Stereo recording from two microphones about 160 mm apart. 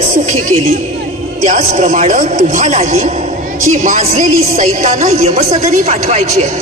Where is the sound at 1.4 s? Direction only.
50° right (ahead or behind).